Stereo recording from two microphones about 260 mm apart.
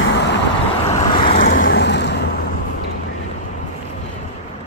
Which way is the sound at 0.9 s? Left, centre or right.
Centre.